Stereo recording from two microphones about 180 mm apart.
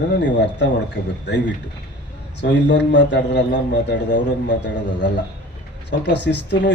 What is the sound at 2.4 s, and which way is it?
Speech, 80° left.